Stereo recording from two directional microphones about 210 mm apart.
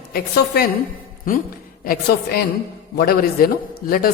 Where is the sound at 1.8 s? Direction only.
45° left (ahead or behind).